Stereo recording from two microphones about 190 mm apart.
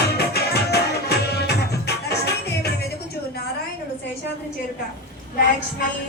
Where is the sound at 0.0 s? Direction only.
60° left (ahead or behind).